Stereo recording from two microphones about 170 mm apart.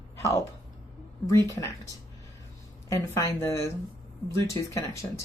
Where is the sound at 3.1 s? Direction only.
15° left (ahead or behind).